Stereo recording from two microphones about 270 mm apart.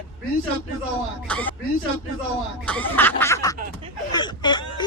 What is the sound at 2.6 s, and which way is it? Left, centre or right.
Speech, centre.